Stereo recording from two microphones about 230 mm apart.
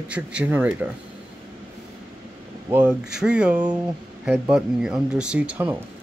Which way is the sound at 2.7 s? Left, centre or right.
Centre.